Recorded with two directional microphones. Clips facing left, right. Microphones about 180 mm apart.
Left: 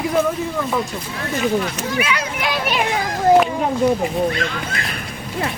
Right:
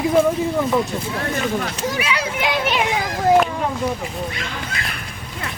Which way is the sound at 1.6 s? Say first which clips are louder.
Left 1 dB; 30° right (ahead or behind).